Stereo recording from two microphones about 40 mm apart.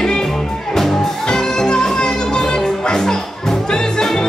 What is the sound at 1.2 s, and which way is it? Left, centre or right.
Music, centre.